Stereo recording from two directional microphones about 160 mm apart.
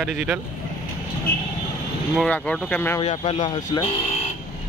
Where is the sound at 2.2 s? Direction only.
5° left (ahead or behind).